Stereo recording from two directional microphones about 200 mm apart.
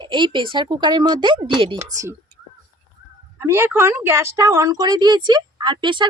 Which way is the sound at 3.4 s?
10° right (ahead or behind).